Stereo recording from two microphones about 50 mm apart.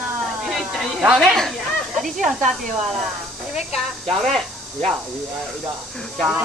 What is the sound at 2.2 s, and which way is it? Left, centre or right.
Speech, centre.